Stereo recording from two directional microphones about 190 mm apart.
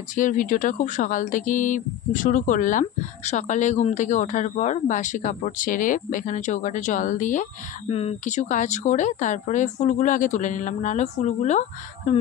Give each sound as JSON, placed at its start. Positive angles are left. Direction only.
{"t": 0.1, "sound": "speech", "side_deg": 45}
{"t": 7.9, "sound": "speech", "side_deg": 30}